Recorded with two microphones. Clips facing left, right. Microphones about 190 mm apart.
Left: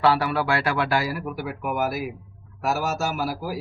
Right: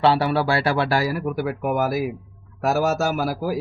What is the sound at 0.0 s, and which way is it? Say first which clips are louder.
A man's voice: right 3 dB; 25° right (ahead or behind).